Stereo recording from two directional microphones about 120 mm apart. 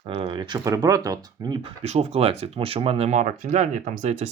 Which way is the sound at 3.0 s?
90° right.